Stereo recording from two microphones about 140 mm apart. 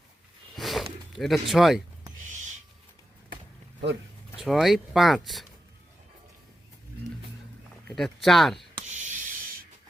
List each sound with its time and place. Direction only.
0.5 s a sound: centre (ahead or behind)
1.1 s speech: centre (ahead or behind)
2.2 s owl: 60° right (ahead or behind)
4.4 s speech: centre (ahead or behind)
7.9 s speech: centre (ahead or behind)
8.9 s writing: 60° right (ahead or behind)